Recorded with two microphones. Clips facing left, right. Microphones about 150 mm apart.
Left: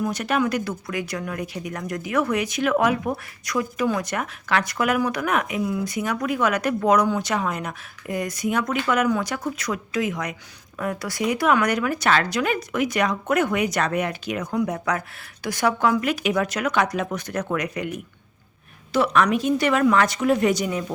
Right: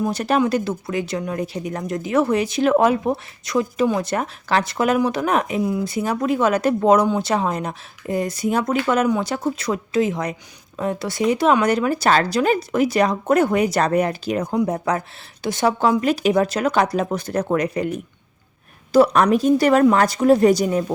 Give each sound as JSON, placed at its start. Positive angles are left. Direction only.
{"t": 0.0, "sound": "speech", "side_deg": -30}